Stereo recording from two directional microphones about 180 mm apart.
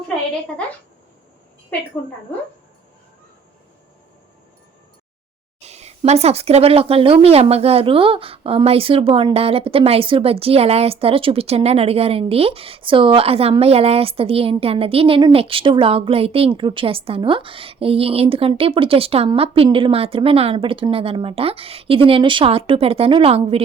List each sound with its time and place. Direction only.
5.5 s speech: 35° right (ahead or behind)